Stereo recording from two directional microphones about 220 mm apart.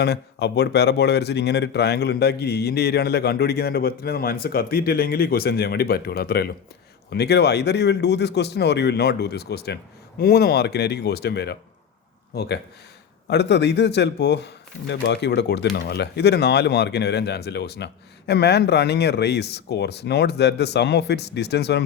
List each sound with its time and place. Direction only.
0.0 s speech: 50° left (ahead or behind)